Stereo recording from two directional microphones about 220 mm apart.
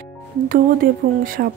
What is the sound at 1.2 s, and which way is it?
Speech, 40° right (ahead or behind).